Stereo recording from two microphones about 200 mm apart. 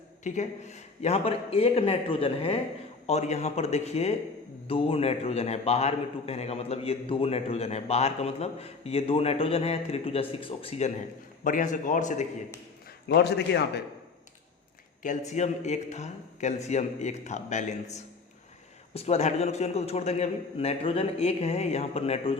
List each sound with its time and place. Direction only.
0.3 s a man's voice: 35° left (ahead or behind)
13.1 s a man's voice: 55° left (ahead or behind)
15.3 s a man's voice: 35° left (ahead or behind)